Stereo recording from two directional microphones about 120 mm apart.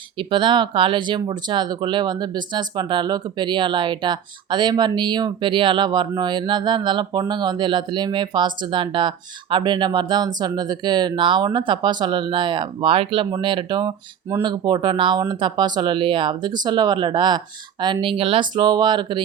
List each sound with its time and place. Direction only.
0.2 s speech: 45° right (ahead or behind)